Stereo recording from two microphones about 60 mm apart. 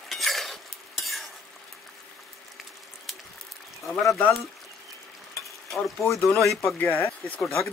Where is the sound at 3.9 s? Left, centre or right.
Centre.